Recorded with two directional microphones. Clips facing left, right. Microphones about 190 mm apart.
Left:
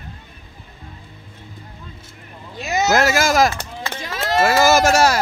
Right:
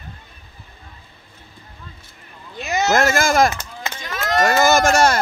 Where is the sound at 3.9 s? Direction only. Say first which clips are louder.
Left 2 dB; 30° left (ahead or behind).